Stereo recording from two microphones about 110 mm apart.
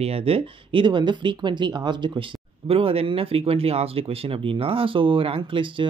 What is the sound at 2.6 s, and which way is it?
Speech, 60° right (ahead or behind).